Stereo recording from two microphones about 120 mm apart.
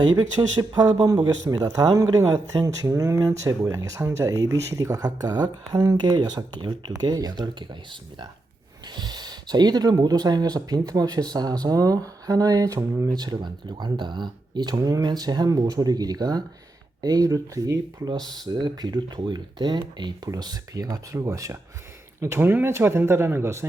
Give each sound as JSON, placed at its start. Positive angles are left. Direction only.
{"t": 0.0, "sound": "speech", "side_deg": -30}
{"t": 8.9, "sound": "speech", "side_deg": -35}